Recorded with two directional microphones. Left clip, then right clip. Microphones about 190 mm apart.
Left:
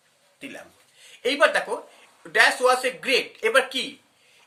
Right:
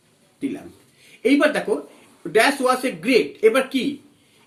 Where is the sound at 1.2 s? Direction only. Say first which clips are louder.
Right 2 dB; 30° left (ahead or behind).